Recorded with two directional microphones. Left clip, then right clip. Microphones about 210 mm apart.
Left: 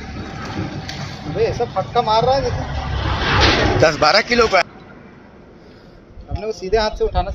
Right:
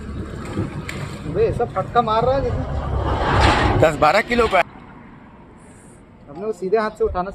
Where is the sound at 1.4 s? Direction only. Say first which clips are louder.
Left 1 dB; 45° right (ahead or behind).